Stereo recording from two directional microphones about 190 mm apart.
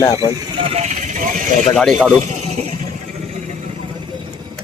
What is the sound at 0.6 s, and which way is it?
Vehicle, 35° right (ahead or behind).